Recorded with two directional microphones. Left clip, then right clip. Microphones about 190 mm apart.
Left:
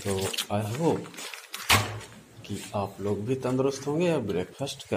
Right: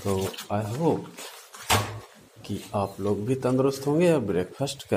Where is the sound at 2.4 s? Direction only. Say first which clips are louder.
Right 3 dB; 25° right (ahead or behind).